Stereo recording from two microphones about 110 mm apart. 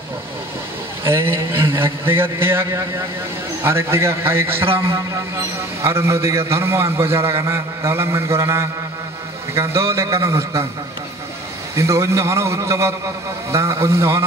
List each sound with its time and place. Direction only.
1.0 s a man's voice: 20° right (ahead or behind)
11.7 s a man's voice: 25° right (ahead or behind)